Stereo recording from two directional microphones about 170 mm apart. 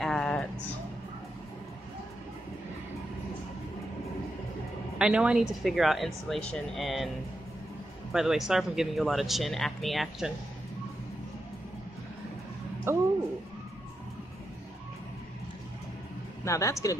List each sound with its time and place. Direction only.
0.0 s a sound: 5° left (ahead or behind)
4.9 s speech: 5° right (ahead or behind)
8.1 s speech: centre (ahead or behind)
12.9 s speech: 15° right (ahead or behind)
16.4 s speech: 20° left (ahead or behind)